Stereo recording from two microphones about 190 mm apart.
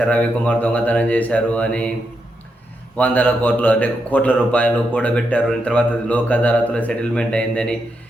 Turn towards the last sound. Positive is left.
turn(degrees=5)  # may be behind; listen again after turning